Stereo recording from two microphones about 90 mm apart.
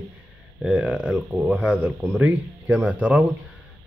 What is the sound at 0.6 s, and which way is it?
Speech, 10° right (ahead or behind).